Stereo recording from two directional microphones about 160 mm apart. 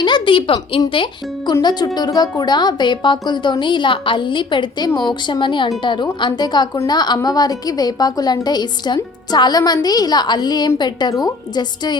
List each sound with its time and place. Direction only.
0.0 s a woman's voice: 30° left (ahead or behind)